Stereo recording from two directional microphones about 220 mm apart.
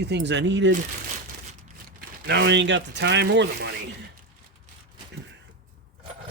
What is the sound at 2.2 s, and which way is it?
Speech, 50° right (ahead or behind).